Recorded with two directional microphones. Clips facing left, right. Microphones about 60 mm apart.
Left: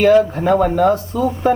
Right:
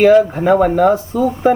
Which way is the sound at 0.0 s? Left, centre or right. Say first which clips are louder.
Right 2 dB; centre.